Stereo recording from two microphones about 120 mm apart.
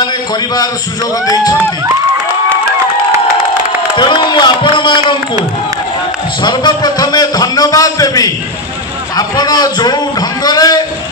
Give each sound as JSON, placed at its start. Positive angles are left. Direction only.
{"t": 1.2, "sound": "a man's voice", "side_deg": 30}
{"t": 3.9, "sound": "a man's voice", "side_deg": 40}
{"t": 6.4, "sound": "a man's voice", "side_deg": 35}